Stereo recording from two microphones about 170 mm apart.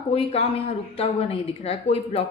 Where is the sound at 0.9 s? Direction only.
35° left (ahead or behind).